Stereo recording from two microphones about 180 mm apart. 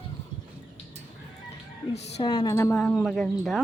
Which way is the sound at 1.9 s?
30° left (ahead or behind).